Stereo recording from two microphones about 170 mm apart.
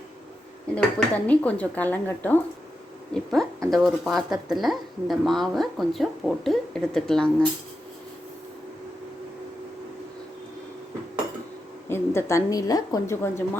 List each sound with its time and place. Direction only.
0.8 s speech: 5° left (ahead or behind)
11.9 s speech: 15° left (ahead or behind)